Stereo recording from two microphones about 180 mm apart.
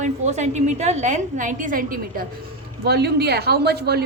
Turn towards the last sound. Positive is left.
turn(degrees=-65)  # may be behind; listen again after turning